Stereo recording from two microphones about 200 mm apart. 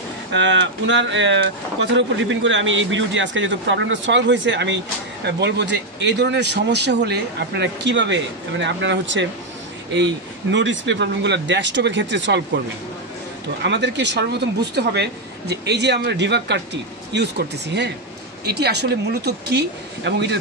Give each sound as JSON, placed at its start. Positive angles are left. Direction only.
{"t": 0.3, "sound": "speech", "side_deg": -65}
{"t": 10.5, "sound": "speech", "side_deg": -65}
{"t": 13.6, "sound": "speech", "side_deg": -60}